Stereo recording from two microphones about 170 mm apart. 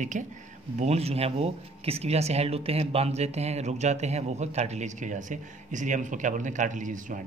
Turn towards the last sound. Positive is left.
turn(degrees=-50)  # may be behind; listen again after turning